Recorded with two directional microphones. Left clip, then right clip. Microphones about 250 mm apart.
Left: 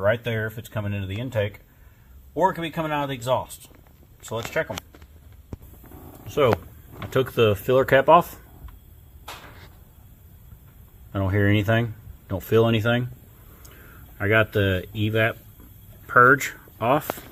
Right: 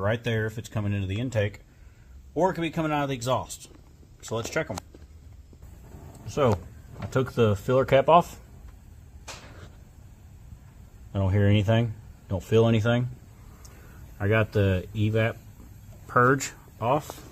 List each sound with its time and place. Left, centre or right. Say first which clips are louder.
0.0 s speech: left 4 dB; centre
6.2 s speech: left 4 dB; centre
11.1 s speech: left 4 dB; centre
14.1 s speech: left 5 dB; centre
16.7 s speech: left 4 dB; centre